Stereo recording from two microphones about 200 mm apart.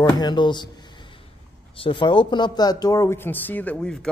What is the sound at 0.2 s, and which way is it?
Speech, 20° left (ahead or behind).